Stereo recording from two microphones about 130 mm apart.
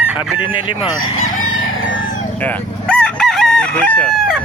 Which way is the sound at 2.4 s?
10° left (ahead or behind).